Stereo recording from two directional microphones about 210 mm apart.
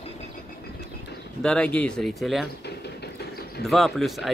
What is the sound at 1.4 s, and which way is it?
Speech, 5° left (ahead or behind).